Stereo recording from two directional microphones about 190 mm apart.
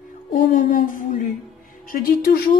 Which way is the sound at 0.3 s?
45° left (ahead or behind).